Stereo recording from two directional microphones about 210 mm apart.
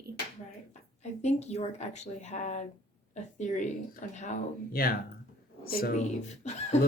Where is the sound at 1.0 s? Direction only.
30° left (ahead or behind).